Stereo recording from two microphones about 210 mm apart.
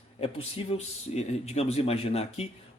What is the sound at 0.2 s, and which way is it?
Speech, 25° left (ahead or behind).